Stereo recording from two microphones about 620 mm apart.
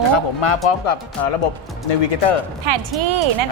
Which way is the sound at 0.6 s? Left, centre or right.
Left.